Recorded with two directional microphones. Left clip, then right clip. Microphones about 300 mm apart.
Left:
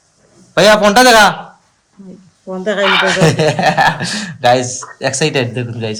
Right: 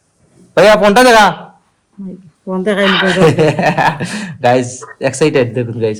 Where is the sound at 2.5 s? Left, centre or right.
Right.